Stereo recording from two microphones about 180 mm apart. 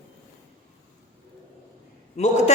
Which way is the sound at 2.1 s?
40° left (ahead or behind).